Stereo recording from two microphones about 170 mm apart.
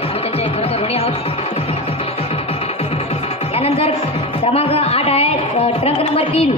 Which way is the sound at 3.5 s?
35° left (ahead or behind).